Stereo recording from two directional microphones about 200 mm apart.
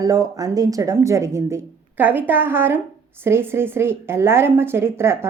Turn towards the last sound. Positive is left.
turn(degrees=-10)  # may be behind; listen again after turning